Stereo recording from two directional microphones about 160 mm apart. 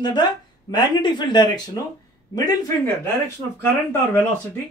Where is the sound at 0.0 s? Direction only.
25° left (ahead or behind).